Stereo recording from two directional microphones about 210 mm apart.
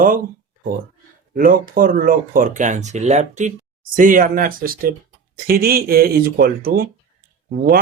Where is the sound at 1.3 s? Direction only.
40° right (ahead or behind).